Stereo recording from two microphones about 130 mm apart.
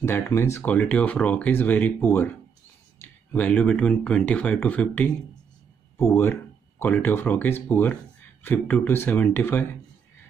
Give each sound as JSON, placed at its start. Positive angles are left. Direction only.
{"t": 0.0, "sound": "speech", "side_deg": 20}
{"t": 5.9, "sound": "speech", "side_deg": 20}